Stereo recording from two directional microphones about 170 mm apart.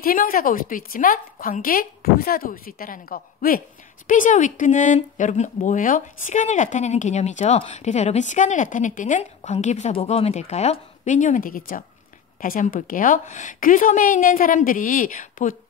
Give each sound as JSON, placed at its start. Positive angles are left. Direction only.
{"t": 0.0, "sound": "a woman's voice", "side_deg": 55}